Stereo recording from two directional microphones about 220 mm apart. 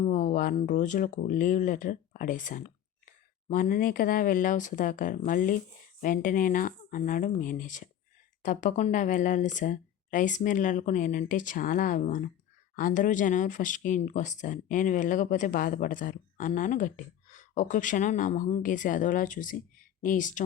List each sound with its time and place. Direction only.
0.0 s speech: 35° left (ahead or behind)